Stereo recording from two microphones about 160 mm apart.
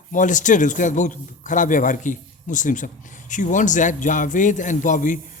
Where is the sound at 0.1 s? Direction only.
50° left (ahead or behind).